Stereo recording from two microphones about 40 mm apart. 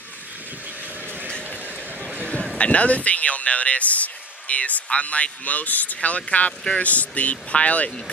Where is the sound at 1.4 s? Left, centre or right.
Right.